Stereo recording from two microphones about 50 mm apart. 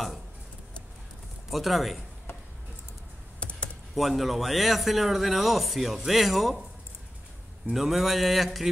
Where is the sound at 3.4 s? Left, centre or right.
Left.